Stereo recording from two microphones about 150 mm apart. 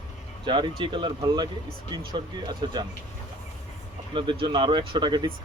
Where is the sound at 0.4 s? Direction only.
30° right (ahead or behind).